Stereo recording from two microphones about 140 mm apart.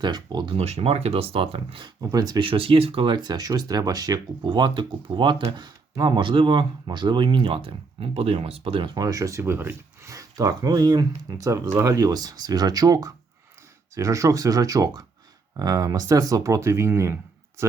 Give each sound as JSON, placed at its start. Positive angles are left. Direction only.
{"t": 0.0, "sound": "speech", "side_deg": -30}
{"t": 0.5, "sound": "speech", "side_deg": -45}
{"t": 2.0, "sound": "speech", "side_deg": -25}
{"t": 9.0, "sound": "speech", "side_deg": -25}